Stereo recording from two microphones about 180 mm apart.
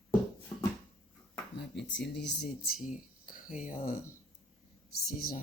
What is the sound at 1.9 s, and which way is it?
Speech, 75° left (ahead or behind).